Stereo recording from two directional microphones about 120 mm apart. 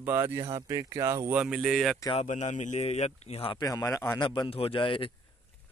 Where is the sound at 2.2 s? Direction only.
80° left; by 3.5 s 55° left (ahead or behind).